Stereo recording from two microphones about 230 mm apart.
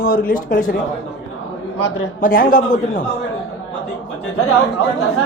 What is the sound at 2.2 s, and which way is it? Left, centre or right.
Speech, left.